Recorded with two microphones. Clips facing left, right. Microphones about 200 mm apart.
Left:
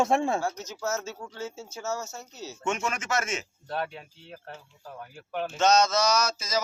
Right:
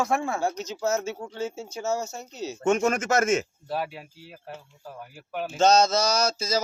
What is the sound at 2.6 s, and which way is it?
Speech, 45° right (ahead or behind).